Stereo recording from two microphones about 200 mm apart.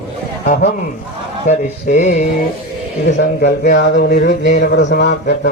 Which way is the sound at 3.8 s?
50° left (ahead or behind).